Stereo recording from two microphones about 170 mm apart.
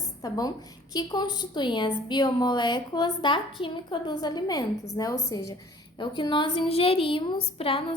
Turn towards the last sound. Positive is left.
turn(degrees=30)  # may be behind; listen again after turning